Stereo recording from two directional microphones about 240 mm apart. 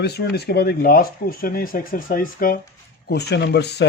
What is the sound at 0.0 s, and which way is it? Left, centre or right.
Speech, left.